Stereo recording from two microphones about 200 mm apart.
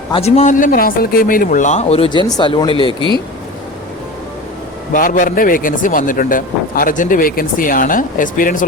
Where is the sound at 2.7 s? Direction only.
25° right (ahead or behind).